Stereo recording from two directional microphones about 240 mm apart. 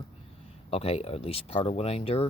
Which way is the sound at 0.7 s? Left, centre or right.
Left.